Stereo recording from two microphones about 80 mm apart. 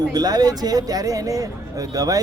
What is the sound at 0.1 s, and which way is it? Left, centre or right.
Speech, right.